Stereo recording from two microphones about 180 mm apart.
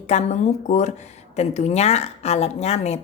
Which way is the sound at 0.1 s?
40° left (ahead or behind).